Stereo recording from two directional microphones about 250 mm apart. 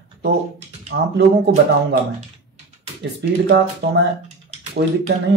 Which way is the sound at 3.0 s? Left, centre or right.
Right.